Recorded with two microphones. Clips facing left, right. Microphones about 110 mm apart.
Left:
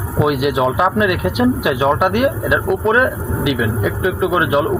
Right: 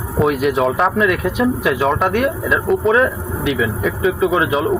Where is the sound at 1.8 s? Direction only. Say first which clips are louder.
Left 3 dB; 5° left (ahead or behind).